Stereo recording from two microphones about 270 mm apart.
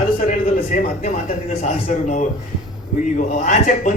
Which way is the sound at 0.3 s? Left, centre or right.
Left.